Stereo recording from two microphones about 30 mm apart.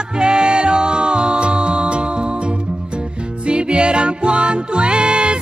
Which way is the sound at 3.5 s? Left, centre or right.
Right.